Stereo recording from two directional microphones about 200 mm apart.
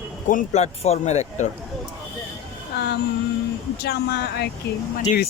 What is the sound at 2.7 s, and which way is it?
Speech, 55° left (ahead or behind).